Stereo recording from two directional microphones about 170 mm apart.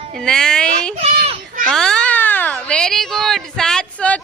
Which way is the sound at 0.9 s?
35° right (ahead or behind).